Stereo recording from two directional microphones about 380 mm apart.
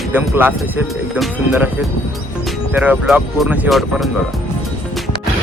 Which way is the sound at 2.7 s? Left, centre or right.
Centre.